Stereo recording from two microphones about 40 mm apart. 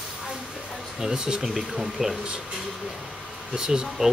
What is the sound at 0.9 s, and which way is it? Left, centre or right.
Speech, centre.